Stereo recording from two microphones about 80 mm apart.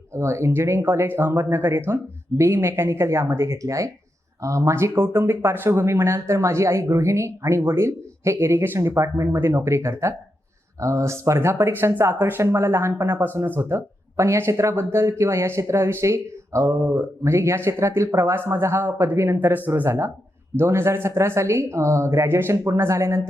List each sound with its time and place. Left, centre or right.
0.1 s speech: right